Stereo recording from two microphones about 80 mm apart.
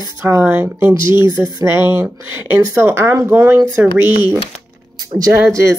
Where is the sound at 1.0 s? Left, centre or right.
Left.